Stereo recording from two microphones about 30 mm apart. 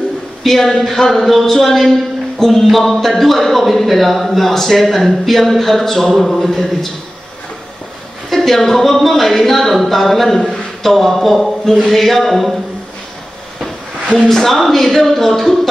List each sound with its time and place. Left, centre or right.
0.4 s speech: centre
2.3 s a sound: centre
2.9 s speech: centre
8.3 s speech: centre
14.1 s speech: centre
14.4 s speech: centre